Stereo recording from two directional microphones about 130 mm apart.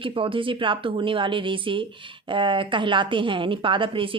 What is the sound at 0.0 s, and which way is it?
A woman's voice, 45° right (ahead or behind).